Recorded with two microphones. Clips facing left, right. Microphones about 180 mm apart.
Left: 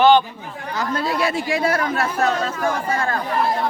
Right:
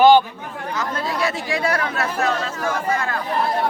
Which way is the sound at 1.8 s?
40° left (ahead or behind).